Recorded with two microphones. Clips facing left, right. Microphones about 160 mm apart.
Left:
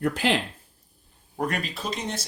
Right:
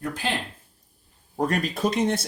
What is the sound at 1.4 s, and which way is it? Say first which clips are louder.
Speech: right 5 dB; 40° right (ahead or behind).